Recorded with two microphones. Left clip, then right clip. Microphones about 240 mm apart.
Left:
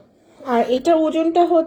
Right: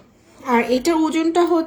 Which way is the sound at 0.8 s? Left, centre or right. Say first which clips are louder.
Left 2 dB; right.